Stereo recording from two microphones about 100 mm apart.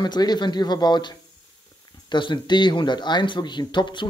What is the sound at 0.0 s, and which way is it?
Speech, 45° left (ahead or behind).